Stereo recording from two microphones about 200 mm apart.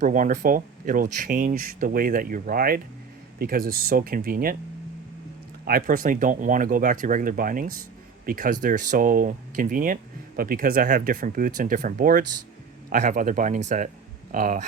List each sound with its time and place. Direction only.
0.0 s speech: 40° right (ahead or behind)
5.6 s speech: 45° right (ahead or behind)